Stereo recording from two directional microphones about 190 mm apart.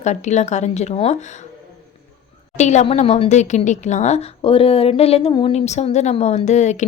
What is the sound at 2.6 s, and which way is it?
A woman's voice, 40° left (ahead or behind).